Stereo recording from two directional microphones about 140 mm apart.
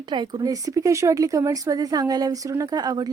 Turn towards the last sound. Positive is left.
turn(degrees=-30)  # may be behind; listen again after turning